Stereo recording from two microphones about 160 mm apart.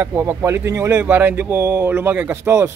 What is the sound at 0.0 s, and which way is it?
Speech, 15° right (ahead or behind).